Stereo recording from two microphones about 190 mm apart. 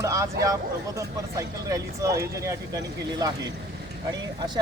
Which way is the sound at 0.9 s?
15° right (ahead or behind).